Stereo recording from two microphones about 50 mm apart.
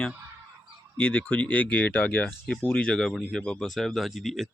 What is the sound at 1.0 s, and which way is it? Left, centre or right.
Speech, left.